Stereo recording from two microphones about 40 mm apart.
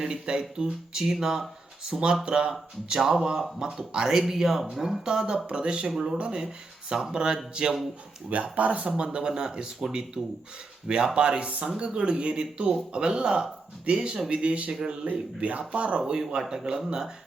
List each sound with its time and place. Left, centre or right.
0.0 s speech: centre
1.8 s speech: right
5.5 s speech: right
8.5 s speech: right
9.1 s speech: right
14.7 s speech: centre
15.0 s speech: right
16.0 s speech: centre